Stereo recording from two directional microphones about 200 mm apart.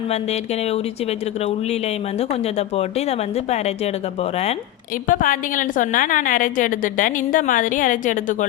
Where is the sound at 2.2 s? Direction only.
30° left (ahead or behind).